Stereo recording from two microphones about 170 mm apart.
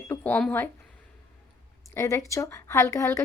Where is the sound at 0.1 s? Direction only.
10° left (ahead or behind).